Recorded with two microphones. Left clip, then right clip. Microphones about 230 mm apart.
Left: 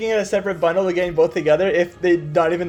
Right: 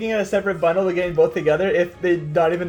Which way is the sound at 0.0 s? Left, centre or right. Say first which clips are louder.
Left 1 dB; left.